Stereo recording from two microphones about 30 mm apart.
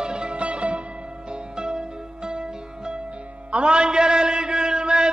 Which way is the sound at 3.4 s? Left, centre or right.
Right.